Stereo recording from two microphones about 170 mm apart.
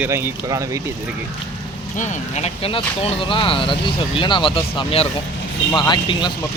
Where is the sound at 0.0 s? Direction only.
15° right (ahead or behind).